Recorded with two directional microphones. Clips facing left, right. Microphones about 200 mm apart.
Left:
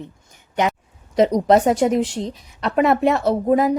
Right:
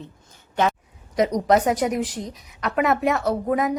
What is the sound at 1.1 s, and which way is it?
A woman's voice, 30° left (ahead or behind).